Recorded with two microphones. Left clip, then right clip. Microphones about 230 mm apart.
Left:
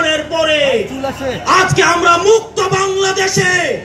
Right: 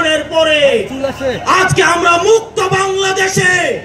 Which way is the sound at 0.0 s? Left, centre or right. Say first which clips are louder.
Right 2 dB; right.